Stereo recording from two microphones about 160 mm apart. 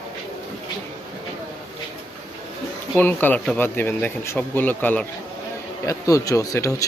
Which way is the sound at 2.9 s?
10° left (ahead or behind).